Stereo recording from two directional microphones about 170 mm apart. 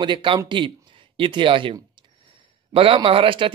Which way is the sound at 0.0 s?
30° right (ahead or behind).